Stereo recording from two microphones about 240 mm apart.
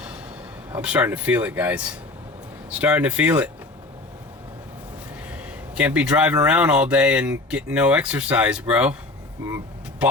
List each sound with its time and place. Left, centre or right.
0.8 s speech: centre
5.3 s speech: centre